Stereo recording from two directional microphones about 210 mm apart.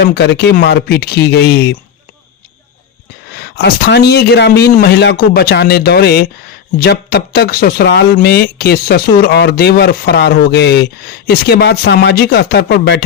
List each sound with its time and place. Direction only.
0.0 s speech: 50° left (ahead or behind)
3.3 s speech: 50° left (ahead or behind)